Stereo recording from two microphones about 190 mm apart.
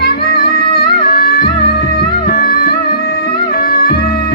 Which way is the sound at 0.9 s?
55° left (ahead or behind).